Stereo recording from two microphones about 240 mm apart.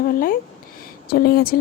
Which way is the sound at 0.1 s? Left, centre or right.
Left.